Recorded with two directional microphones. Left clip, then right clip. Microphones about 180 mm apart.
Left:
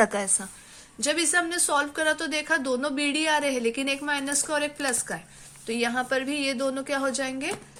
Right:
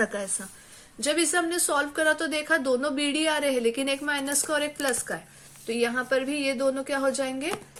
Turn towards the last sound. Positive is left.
turn(degrees=20)  # may be behind; listen again after turning